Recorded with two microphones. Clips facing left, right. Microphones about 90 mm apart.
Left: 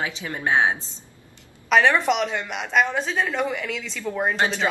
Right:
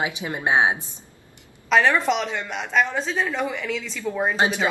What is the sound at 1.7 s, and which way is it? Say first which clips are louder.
Speech: left 1 dB; centre (ahead or behind).